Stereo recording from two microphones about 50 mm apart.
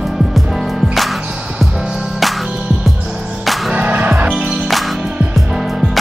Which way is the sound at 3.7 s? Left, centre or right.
Right.